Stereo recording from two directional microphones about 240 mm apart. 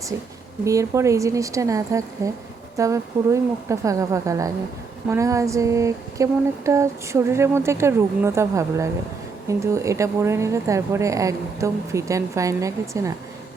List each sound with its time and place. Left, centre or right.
0.6 s a woman's voice: centre